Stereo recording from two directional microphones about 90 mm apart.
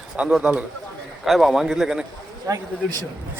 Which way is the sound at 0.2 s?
10° right (ahead or behind).